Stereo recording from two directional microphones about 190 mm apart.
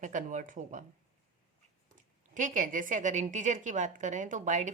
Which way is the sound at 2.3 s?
40° right (ahead or behind).